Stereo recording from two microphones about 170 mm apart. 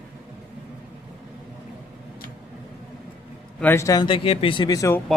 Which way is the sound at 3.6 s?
15° left (ahead or behind).